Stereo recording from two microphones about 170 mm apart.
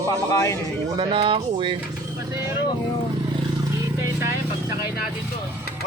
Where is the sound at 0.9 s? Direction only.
30° right (ahead or behind).